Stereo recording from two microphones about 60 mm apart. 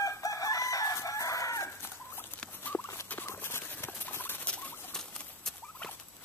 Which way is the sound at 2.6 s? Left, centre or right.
Left.